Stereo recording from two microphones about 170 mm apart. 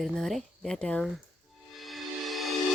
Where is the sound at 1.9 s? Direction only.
Centre (ahead or behind).